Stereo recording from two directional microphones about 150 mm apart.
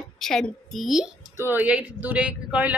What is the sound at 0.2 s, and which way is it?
A woman's voice, centre (ahead or behind).